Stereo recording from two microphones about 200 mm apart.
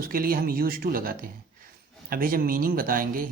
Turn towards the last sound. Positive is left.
turn(degrees=-45)  # may be behind; listen again after turning